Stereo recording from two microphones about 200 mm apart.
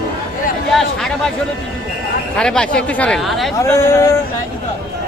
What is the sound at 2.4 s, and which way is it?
Speech, 5° left (ahead or behind).